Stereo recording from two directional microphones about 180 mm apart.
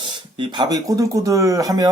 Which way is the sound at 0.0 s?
25° right (ahead or behind).